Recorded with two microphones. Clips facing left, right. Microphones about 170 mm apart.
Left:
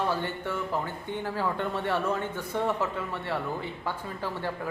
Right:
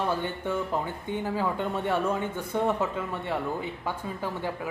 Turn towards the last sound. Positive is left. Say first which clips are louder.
# right 1 dB
turn(degrees=-20)  # may be behind; listen again after turning